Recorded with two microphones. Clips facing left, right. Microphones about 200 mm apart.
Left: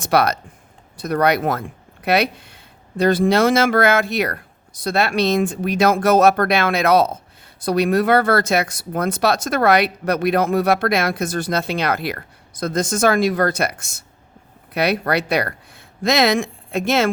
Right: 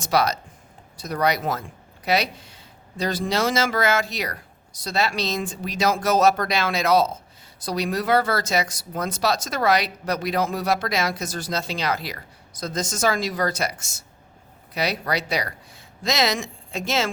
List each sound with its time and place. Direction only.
0.0 s speech: 60° left (ahead or behind)